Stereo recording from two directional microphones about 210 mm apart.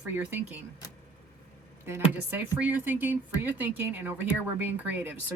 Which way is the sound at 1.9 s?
10° right (ahead or behind).